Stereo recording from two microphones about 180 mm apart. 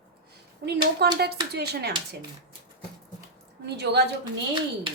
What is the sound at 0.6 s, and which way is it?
A woman's voice, 65° right (ahead or behind).